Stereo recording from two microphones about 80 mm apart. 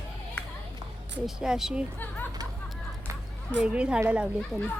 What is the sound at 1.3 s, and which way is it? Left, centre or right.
Speech, centre.